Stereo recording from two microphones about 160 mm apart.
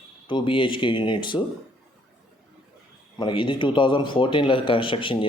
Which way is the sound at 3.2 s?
30° left (ahead or behind).